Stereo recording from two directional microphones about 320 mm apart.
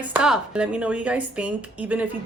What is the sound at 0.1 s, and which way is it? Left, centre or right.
A woman's voice, centre.